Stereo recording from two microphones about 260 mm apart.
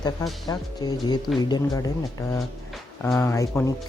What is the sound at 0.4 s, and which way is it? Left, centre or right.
Speech, centre.